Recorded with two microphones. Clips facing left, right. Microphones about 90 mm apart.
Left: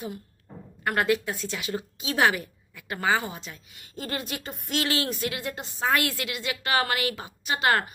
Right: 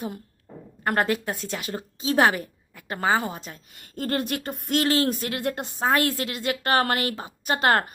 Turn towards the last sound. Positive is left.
turn(degrees=-45)  # may be behind; listen again after turning